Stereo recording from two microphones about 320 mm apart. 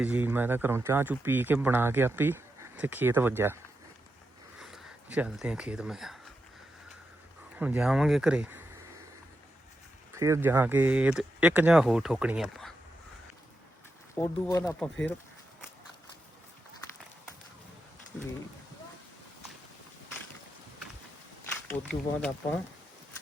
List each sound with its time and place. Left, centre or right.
0.0 s speech: centre
4.6 s speech: centre
7.6 s speech: centre
10.2 s speech: centre
14.2 s speech: centre
21.7 s speech: centre